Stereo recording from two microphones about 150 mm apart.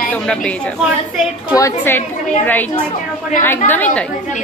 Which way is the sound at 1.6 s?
15° left (ahead or behind).